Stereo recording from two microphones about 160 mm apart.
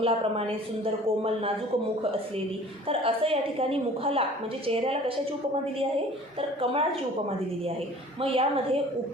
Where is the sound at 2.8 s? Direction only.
35° right (ahead or behind).